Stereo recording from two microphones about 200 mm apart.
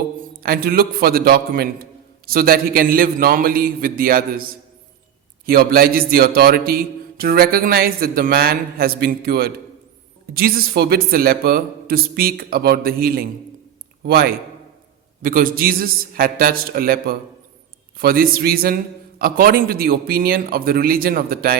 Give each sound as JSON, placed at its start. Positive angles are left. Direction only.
{"t": 0.4, "sound": "a man's voice", "side_deg": -50}
{"t": 5.5, "sound": "a man's voice", "side_deg": -50}